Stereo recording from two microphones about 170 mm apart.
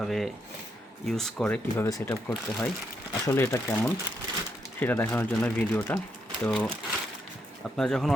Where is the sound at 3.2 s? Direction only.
15° left (ahead or behind).